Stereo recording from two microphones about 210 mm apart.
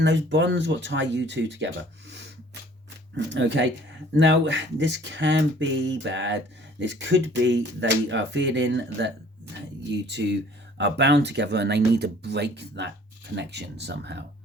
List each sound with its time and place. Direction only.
0.0 s speech: 60° right (ahead or behind)
3.2 s speech: 55° right (ahead or behind)